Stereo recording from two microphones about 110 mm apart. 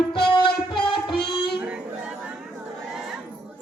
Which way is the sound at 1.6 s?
10° right (ahead or behind).